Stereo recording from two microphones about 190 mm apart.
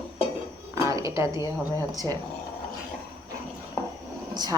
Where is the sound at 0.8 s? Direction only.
15° right (ahead or behind).